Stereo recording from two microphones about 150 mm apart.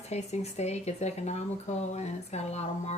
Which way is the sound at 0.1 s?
45° left (ahead or behind).